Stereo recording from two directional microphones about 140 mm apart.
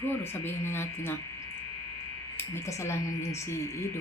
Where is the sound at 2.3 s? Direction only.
20° left (ahead or behind).